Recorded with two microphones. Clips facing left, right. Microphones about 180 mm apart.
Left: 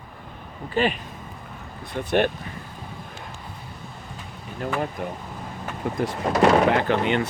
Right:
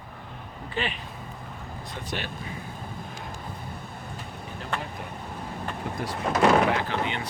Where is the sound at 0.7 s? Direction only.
45° left (ahead or behind).